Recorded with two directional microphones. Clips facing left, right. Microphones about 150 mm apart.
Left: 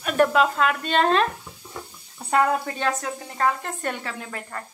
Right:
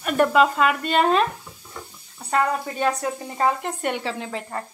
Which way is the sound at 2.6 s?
10° right (ahead or behind).